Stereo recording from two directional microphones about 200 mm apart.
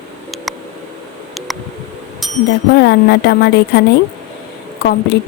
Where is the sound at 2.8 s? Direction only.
55° left (ahead or behind).